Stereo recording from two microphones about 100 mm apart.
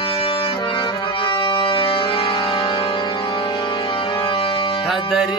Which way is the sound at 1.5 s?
60° left (ahead or behind).